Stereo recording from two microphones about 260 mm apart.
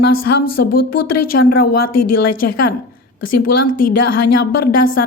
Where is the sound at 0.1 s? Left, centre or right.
Left.